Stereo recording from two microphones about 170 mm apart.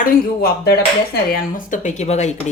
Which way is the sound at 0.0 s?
65° left (ahead or behind).